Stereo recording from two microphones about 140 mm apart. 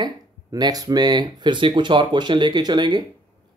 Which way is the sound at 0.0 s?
30° right (ahead or behind).